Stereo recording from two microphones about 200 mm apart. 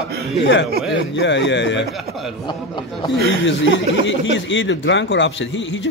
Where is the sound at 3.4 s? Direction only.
65° left (ahead or behind).